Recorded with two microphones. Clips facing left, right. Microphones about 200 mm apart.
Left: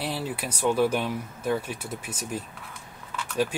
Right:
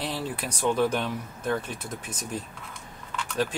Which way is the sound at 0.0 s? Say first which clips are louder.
Left 1 dB; 5° left (ahead or behind).